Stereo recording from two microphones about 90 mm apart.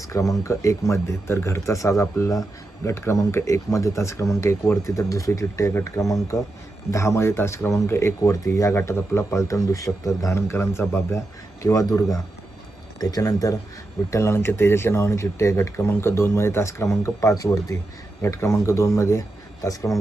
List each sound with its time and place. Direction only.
0.0 s speech: 40° left (ahead or behind)
11.6 s speech: 40° left (ahead or behind)